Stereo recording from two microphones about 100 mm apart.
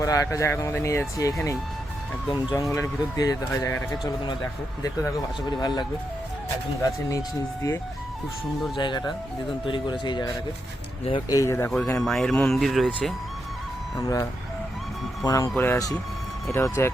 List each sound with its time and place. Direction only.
0.0 s speech: 35° left (ahead or behind)
2.3 s speech: 45° left (ahead or behind)
5.5 s speech: 40° left (ahead or behind)
6.8 s speech: 35° left (ahead or behind)
8.8 s speech: 45° left (ahead or behind)
11.3 s speech: 30° left (ahead or behind)
11.9 s speech: 5° left (ahead or behind)
14.0 s speech: 35° left (ahead or behind)
15.5 s speech: 20° left (ahead or behind)